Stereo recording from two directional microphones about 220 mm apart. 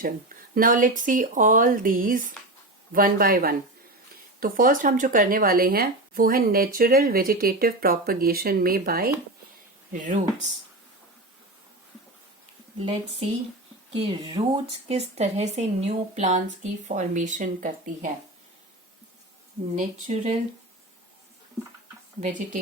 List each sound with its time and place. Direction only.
0.0 s speech: 40° right (ahead or behind)
12.8 s speech: 25° right (ahead or behind)
19.7 s speech: 35° right (ahead or behind)